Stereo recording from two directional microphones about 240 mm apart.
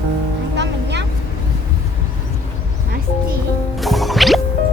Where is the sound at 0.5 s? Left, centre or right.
Right.